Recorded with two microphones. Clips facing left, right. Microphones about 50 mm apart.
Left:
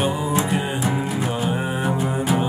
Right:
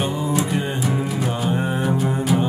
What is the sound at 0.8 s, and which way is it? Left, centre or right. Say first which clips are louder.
Music: even; centre.